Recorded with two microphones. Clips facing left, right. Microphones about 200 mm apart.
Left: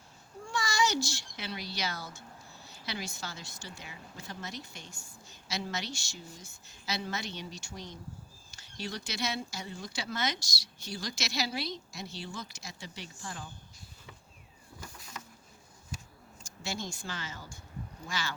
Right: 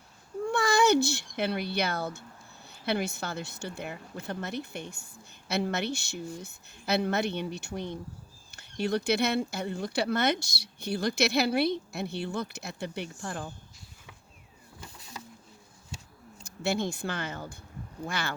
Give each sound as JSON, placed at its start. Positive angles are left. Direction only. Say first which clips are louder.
{"t": 0.4, "sound": "speech", "louder": "right 8 dB", "side_deg": -60}
{"t": 16.4, "sound": "speech", "louder": "right 9 dB", "side_deg": -60}